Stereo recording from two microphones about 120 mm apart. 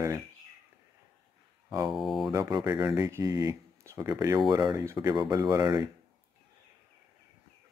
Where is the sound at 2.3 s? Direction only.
30° right (ahead or behind).